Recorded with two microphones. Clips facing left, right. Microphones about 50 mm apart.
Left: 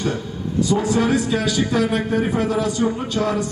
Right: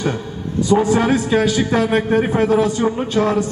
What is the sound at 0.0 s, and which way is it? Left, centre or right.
A man's voice, right.